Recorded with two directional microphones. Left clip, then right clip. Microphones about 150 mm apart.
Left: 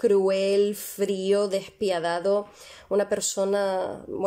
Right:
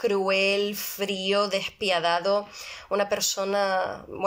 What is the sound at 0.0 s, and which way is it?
Speech, 45° left (ahead or behind).